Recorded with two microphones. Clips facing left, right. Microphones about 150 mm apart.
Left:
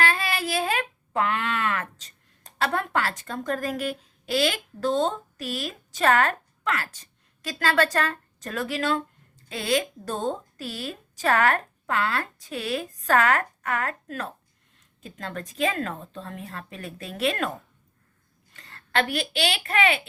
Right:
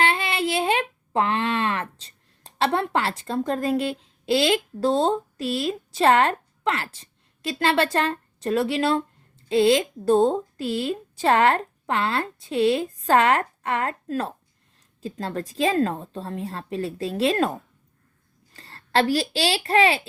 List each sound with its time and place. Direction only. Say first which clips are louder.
0.0 s a woman's voice: right 3 dB; 25° right (ahead or behind)
18.5 s speech: right 4 dB; 30° right (ahead or behind)